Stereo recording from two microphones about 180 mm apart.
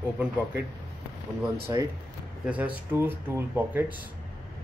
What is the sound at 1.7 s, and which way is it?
Speech, 20° right (ahead or behind).